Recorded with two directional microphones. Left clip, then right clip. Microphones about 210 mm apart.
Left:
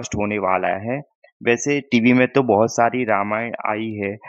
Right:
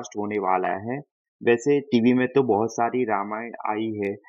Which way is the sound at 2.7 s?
50° left (ahead or behind).